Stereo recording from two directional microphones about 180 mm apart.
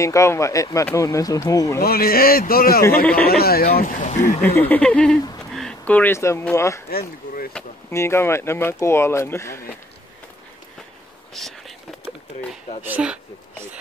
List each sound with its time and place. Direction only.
0.0 s speech: 15° left (ahead or behind)
1.8 s a man's voice: 55° left (ahead or behind)
3.7 s speech: 45° left (ahead or behind)
4.4 s speech: 10° left (ahead or behind)
6.9 s speech: 55° left (ahead or behind)
7.9 s speech: 15° left (ahead or behind)
11.3 s whispering: centre (ahead or behind)
12.8 s speech: 10° right (ahead or behind)